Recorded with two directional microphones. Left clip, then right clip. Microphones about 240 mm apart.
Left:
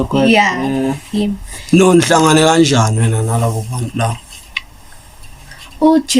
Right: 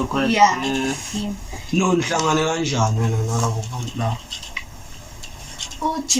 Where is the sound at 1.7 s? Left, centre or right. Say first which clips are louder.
Left 10 dB; left.